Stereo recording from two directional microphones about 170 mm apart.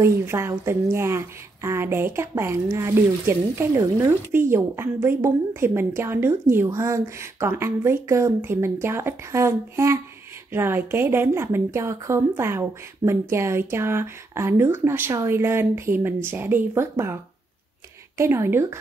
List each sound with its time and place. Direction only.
0.0 s a woman's voice: 15° right (ahead or behind)